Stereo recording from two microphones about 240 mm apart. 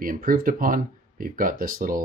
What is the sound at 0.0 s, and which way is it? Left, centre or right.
Speech, right.